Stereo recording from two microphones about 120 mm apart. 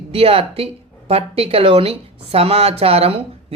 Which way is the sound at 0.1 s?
55° right (ahead or behind).